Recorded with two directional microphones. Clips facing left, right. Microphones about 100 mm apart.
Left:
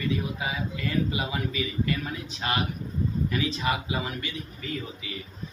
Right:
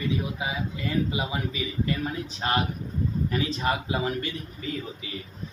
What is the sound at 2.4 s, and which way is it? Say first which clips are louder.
A man's voice: right 2 dB; 30° right (ahead or behind).